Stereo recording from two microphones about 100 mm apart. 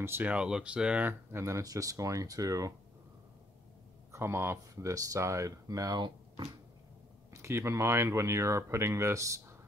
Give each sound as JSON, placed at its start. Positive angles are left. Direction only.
{"t": 0.0, "sound": "speech", "side_deg": -25}
{"t": 0.3, "sound": "speech", "side_deg": -10}
{"t": 1.3, "sound": "speech", "side_deg": -30}
{"t": 4.1, "sound": "speech", "side_deg": -25}
{"t": 7.3, "sound": "speech", "side_deg": -30}